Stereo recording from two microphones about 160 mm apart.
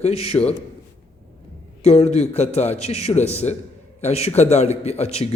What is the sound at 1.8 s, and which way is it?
A man's voice, 40° left (ahead or behind).